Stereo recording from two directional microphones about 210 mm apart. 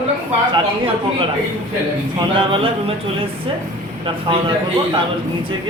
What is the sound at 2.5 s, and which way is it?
Speech, 25° right (ahead or behind).